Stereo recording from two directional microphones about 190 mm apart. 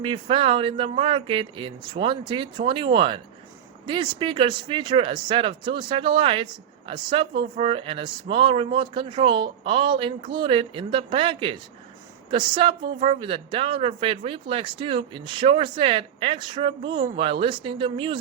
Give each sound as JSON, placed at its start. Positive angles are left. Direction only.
{"t": 0.0, "sound": "speech", "side_deg": -25}